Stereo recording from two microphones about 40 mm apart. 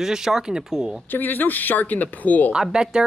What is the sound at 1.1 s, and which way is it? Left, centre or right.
Speech, left.